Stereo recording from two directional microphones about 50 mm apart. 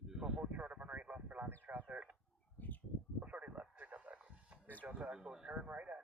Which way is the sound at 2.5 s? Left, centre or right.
Left.